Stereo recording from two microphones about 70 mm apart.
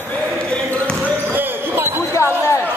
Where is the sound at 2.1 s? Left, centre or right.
Left.